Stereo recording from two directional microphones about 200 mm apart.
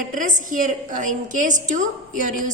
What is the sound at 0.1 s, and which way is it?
A woman's voice, 40° right (ahead or behind).